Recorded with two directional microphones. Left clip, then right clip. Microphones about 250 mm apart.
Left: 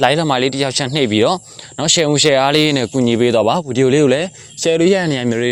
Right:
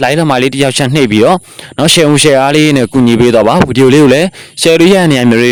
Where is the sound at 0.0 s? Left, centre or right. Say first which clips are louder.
Right 4 dB; right.